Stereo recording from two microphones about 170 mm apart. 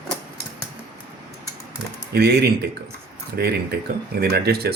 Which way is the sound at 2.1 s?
70° right (ahead or behind).